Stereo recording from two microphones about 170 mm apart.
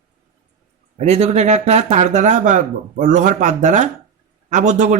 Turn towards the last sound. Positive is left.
turn(degrees=-45)  # may be behind; listen again after turning